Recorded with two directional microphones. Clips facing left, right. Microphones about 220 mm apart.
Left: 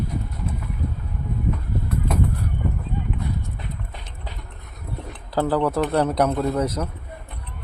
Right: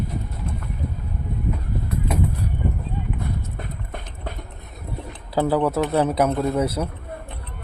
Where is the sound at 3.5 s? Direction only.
55° right (ahead or behind).